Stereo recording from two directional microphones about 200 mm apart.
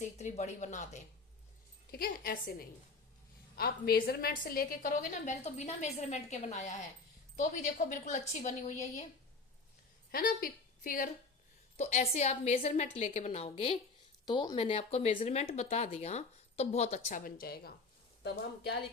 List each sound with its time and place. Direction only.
0.0 s a woman's voice: 35° left (ahead or behind)
1.9 s a woman's voice: 50° left (ahead or behind)
10.1 s a woman's voice: 45° left (ahead or behind)
11.8 s a woman's voice: 35° left (ahead or behind)
14.3 s speech: 20° left (ahead or behind)
14.5 s a woman's voice: 30° left (ahead or behind); by 18.8 s 55° left (ahead or behind)